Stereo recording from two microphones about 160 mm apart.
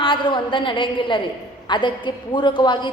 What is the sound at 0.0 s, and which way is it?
A woman's voice, 30° left (ahead or behind).